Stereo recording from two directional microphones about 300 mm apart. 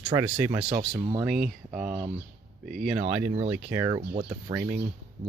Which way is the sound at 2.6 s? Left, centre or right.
Right.